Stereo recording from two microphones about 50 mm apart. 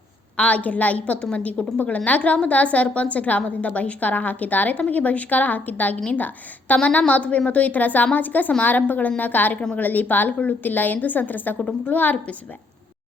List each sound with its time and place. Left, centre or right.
0.3 s a woman's voice: left